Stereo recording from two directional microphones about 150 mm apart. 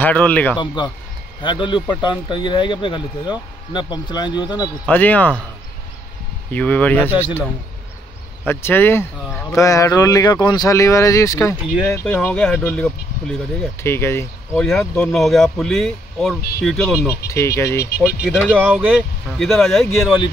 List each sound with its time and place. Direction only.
0.0 s speech: 10° left (ahead or behind)
0.6 s speech: 30° left (ahead or behind)
4.8 s speech: 10° left (ahead or behind)
6.5 s speech: 10° left (ahead or behind)
8.5 s speech: 15° left (ahead or behind)
12.0 s speech: 5° left (ahead or behind)
13.7 s speech: 15° left (ahead or behind)
14.6 s speech: 5° left (ahead or behind)
17.1 s speech: 20° left (ahead or behind)
18.0 s speech: 5° right (ahead or behind)